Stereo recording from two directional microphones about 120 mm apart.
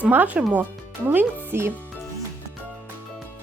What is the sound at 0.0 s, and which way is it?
Speech, 15° right (ahead or behind).